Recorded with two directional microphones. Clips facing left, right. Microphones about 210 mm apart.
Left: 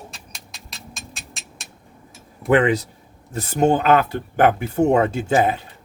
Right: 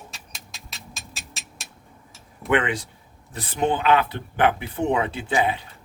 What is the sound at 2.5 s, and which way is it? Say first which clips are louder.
Speech: left 6 dB; 40° left (ahead or behind).